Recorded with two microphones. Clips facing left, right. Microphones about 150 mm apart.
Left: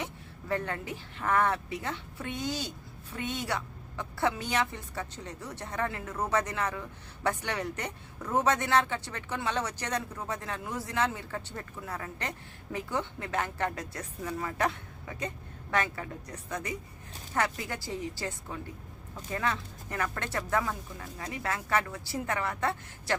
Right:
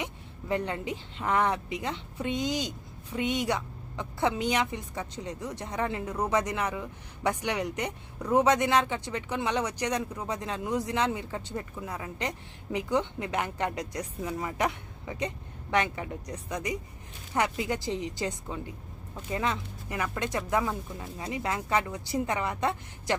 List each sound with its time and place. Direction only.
0.0 s a woman's voice: 15° right (ahead or behind)